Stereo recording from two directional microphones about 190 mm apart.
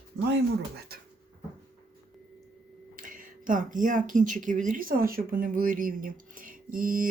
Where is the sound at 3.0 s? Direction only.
45° right (ahead or behind).